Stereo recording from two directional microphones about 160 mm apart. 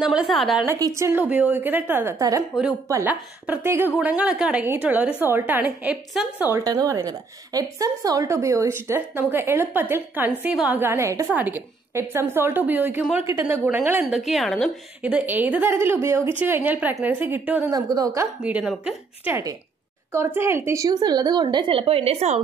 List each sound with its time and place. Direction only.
0.0 s a woman's voice: 5° right (ahead or behind)
0.7 s a woman's voice: 20° right (ahead or behind); by 6.2 s centre (ahead or behind)
6.6 s a woman's voice: 25° right (ahead or behind)
17.7 s a woman's voice: 25° right (ahead or behind); by 22.4 s 40° right (ahead or behind)